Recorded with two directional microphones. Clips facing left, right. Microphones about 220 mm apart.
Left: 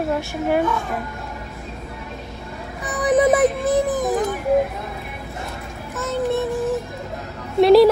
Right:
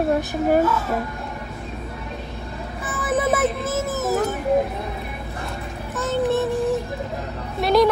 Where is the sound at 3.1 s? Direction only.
15° left (ahead or behind).